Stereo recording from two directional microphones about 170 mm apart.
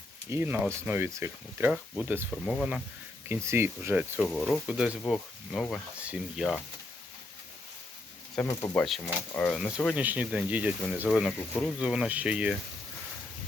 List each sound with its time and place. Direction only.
0.3 s speech: 15° right (ahead or behind)
4.2 s speech: centre (ahead or behind)
8.4 s speech: 20° left (ahead or behind)
8.7 s speech: centre (ahead or behind)
9.6 s speech: 5° right (ahead or behind)